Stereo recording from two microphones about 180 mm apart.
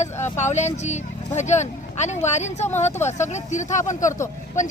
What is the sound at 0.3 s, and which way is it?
Speech, 40° left (ahead or behind).